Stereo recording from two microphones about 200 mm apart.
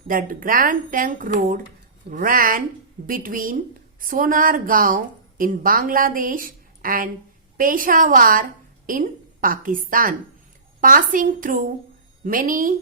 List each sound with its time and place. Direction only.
0.1 s a woman's voice: 45° right (ahead or behind)